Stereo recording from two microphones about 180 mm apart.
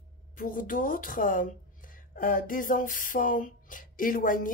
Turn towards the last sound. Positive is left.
turn(degrees=50)  # may be behind; listen again after turning